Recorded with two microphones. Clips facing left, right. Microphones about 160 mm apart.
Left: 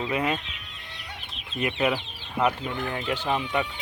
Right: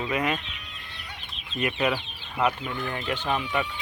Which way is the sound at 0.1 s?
25° left (ahead or behind).